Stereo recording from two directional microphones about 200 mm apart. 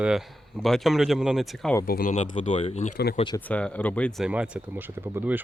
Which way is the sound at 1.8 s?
45° left (ahead or behind).